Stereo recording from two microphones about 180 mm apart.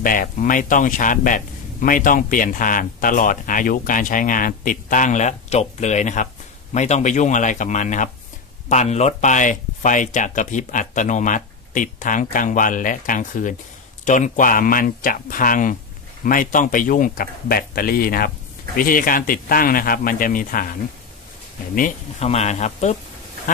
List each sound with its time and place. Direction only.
0.0 s speech: 50° left (ahead or behind)
21.7 s speech: 45° left (ahead or behind)